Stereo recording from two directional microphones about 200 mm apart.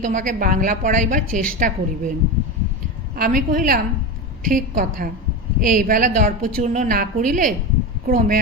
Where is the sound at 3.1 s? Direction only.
45° right (ahead or behind).